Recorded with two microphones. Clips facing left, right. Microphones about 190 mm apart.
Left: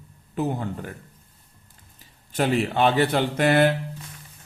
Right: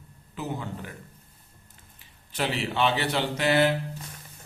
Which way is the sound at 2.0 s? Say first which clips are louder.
Left 6 dB; 50° left (ahead or behind).